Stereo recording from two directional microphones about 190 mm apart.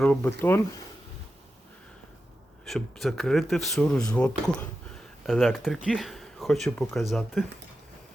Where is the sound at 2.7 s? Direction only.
Centre (ahead or behind).